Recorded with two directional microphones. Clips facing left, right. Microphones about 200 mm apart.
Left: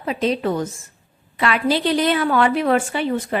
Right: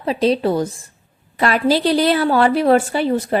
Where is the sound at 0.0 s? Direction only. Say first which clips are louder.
Right 4 dB; 35° right (ahead or behind).